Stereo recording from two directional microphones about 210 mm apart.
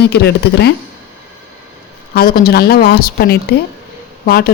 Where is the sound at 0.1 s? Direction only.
50° left (ahead or behind).